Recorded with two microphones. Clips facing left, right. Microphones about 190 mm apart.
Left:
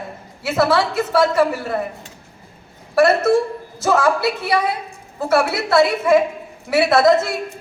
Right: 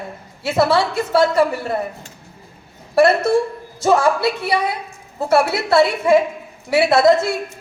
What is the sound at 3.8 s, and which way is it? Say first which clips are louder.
A woman's voice: right 2 dB; 30° right (ahead or behind).